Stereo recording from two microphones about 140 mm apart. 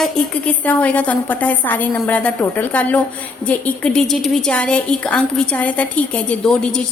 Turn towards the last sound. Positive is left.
turn(degrees=5)  # may be behind; listen again after turning